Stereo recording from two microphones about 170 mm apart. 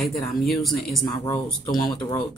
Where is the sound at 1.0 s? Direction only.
25° left (ahead or behind).